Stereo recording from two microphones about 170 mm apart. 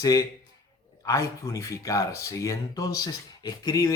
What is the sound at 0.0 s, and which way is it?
Speech, 20° left (ahead or behind).